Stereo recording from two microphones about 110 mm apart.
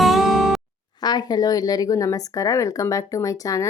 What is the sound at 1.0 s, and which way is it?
Speech, 40° left (ahead or behind).